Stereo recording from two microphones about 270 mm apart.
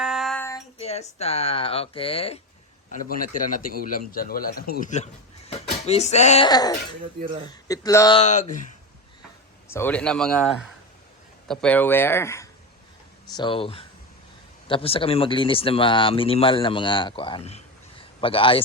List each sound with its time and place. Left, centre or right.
0.0 s a sound: centre
0.8 s a man's voice: left
8.2 s speech: left
9.6 s speech: centre